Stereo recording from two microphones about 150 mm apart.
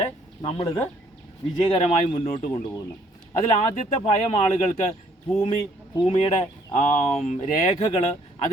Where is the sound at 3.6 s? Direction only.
45° left (ahead or behind).